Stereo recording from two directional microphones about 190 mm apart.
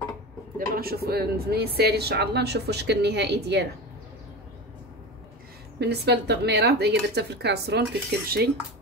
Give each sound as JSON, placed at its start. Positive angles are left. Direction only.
{"t": 0.6, "sound": "speech", "side_deg": -50}
{"t": 5.8, "sound": "speech", "side_deg": -65}